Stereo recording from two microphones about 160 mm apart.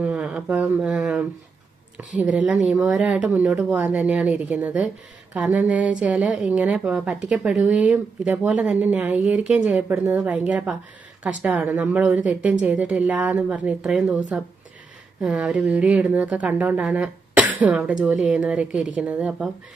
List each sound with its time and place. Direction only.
0.0 s a woman's voice: 10° right (ahead or behind)